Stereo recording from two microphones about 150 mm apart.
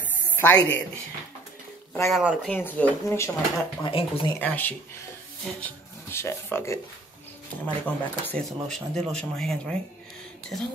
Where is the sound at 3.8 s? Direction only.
35° left (ahead or behind).